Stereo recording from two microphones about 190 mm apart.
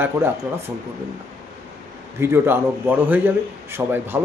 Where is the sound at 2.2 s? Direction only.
10° right (ahead or behind).